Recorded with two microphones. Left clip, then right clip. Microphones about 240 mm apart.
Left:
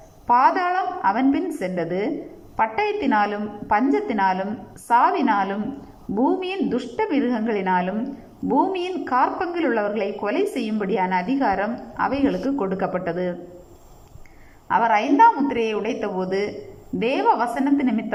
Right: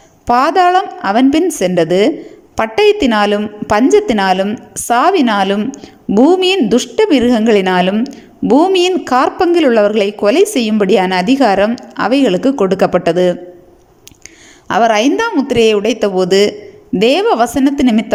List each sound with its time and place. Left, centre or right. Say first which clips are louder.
0.3 s a woman's voice: right 8 dB; right
14.7 s a woman's voice: right 8 dB; right